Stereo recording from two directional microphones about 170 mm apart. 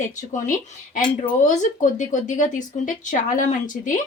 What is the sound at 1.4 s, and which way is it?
Speech, 45° left (ahead or behind).